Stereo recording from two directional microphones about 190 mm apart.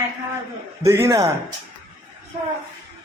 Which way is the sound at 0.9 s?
15° right (ahead or behind).